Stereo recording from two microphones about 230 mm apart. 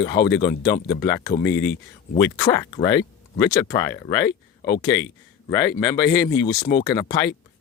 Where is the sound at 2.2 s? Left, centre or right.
Centre.